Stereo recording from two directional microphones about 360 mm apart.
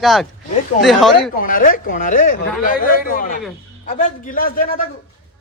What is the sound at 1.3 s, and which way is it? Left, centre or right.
Speech, left.